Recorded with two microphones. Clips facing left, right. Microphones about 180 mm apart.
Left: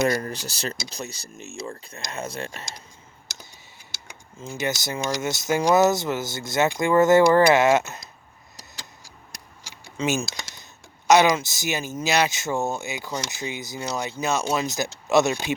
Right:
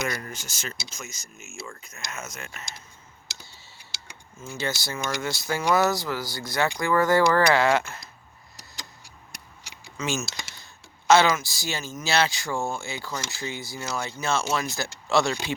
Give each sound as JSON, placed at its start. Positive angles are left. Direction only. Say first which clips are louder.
{"t": 0.0, "sound": "speech", "louder": "left 8 dB", "side_deg": 35}
{"t": 4.4, "sound": "speech", "louder": "left 3 dB", "side_deg": 20}
{"t": 10.2, "sound": "typing", "louder": "left 2 dB", "side_deg": 20}
{"t": 11.1, "sound": "speech", "louder": "left 2 dB", "side_deg": 15}